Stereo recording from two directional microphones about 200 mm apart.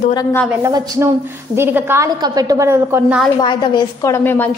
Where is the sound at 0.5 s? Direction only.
15° right (ahead or behind).